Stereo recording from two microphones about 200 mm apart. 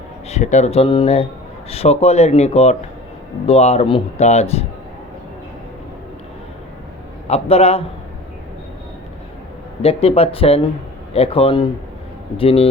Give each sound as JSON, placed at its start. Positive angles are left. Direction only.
{"t": 0.3, "sound": "speech", "side_deg": 35}
{"t": 7.3, "sound": "speech", "side_deg": 30}
{"t": 9.8, "sound": "speech", "side_deg": 30}